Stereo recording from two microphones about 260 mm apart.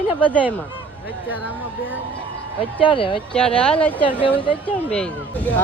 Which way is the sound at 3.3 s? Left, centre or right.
Centre.